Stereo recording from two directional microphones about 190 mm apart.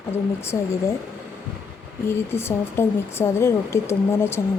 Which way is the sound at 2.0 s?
10° left (ahead or behind).